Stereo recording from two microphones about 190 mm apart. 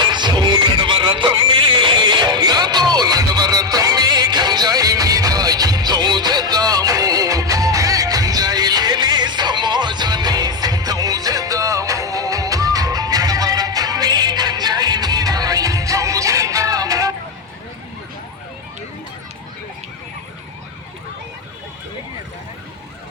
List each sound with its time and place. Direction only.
0.1 s music: 25° right (ahead or behind)